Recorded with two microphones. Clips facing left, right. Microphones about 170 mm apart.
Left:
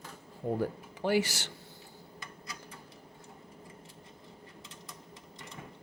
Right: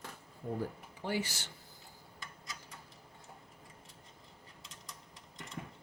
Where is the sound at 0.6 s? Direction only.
85° left.